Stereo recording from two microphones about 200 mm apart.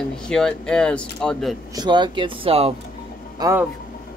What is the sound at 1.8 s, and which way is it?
Speech, 20° right (ahead or behind).